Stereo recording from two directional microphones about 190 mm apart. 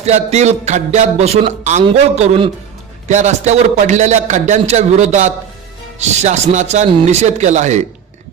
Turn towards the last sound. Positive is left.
turn(degrees=-35)  # may be behind; listen again after turning